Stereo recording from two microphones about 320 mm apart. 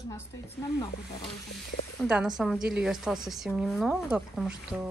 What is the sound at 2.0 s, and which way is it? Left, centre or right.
A woman's voice, centre.